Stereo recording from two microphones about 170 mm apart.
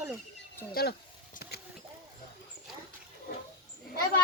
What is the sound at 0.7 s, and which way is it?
Speech, 65° left (ahead or behind).